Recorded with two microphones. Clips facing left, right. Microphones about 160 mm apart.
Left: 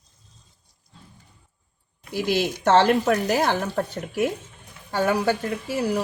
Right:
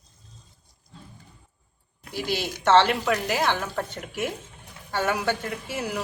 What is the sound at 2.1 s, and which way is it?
Speech, 45° left (ahead or behind).